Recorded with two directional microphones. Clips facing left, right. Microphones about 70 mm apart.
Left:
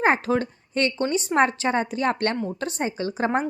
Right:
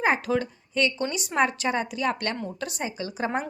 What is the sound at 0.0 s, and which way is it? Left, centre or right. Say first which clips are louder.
A woman's voice: left 3 dB; left.